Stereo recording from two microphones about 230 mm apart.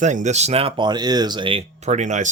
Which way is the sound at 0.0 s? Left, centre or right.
Right.